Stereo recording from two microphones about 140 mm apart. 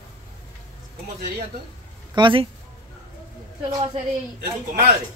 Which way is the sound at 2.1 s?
35° right (ahead or behind).